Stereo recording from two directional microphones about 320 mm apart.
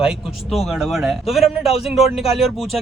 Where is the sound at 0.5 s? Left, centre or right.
Centre.